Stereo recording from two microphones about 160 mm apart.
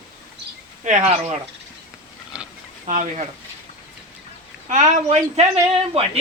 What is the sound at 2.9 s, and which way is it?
Speech, 50° right (ahead or behind).